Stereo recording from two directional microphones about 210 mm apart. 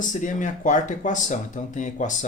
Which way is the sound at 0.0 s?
35° left (ahead or behind).